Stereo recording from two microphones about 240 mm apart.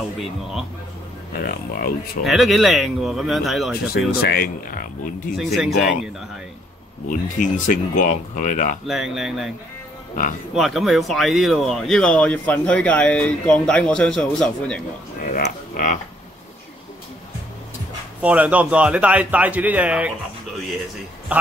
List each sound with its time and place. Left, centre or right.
1.3 s speech: left
2.2 s speech: centre
3.8 s speech: left
5.4 s speech: centre
5.7 s speech: left
7.1 s speech: left
8.8 s speech: centre
10.5 s speech: centre
15.2 s speech: left
18.2 s speech: centre
21.3 s a man's voice: centre